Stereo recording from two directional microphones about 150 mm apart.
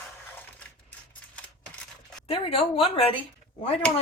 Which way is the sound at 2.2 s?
40° left (ahead or behind).